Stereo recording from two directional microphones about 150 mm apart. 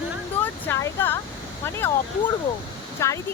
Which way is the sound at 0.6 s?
15° left (ahead or behind).